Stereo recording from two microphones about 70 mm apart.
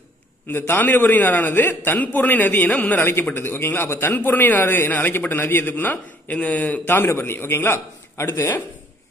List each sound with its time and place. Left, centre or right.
0.5 s a man's voice: left
3.0 s a man's voice: left
6.9 s a man's voice: left